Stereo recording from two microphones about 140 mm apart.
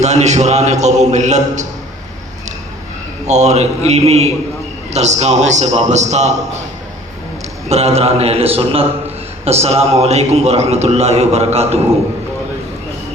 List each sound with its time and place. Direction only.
0.0 s a man's voice: 55° right (ahead or behind)
3.2 s a man's voice: 55° right (ahead or behind)
7.7 s a man's voice: 45° right (ahead or behind)